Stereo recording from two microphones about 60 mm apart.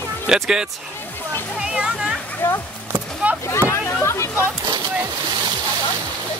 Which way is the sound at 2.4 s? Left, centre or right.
Left.